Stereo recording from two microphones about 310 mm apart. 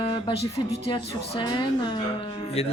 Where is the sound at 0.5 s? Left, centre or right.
Centre.